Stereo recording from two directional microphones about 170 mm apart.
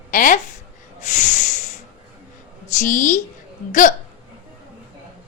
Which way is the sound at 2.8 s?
50° left (ahead or behind).